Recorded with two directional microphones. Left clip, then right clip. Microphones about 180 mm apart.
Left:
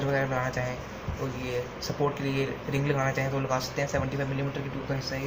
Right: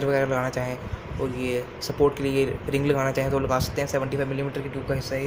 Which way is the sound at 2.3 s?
60° right (ahead or behind).